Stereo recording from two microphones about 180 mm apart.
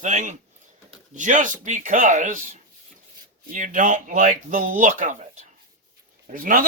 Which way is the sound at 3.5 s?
45° right (ahead or behind).